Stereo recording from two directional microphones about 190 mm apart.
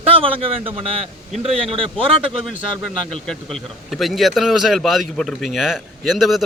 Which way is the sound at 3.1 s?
5° left (ahead or behind).